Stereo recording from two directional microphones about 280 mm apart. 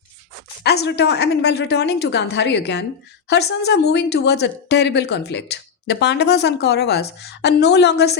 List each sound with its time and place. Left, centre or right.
0.6 s speech: left